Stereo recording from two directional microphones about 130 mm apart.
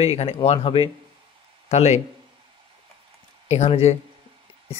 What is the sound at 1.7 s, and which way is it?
Speech, 60° left (ahead or behind).